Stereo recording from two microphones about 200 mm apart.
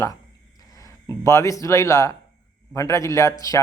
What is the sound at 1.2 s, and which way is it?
A man's voice, 15° left (ahead or behind).